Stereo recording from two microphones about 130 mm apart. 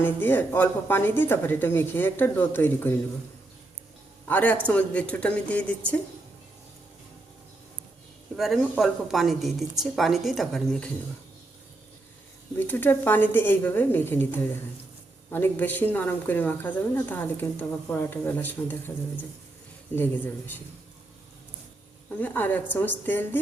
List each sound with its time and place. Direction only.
0.0 s speech: 15° left (ahead or behind)
4.3 s speech: 10° left (ahead or behind)
8.4 s a woman's voice: centre (ahead or behind)
12.5 s speech: 15° left (ahead or behind)
20.0 s speech: 15° left (ahead or behind)
22.2 s speech: 15° left (ahead or behind)